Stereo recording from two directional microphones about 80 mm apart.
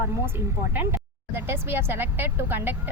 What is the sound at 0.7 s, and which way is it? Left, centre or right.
Speech, right.